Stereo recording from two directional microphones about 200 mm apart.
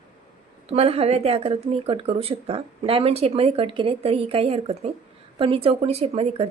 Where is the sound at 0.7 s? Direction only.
30° right (ahead or behind).